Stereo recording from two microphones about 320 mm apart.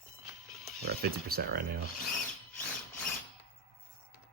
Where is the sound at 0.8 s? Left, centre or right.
Right.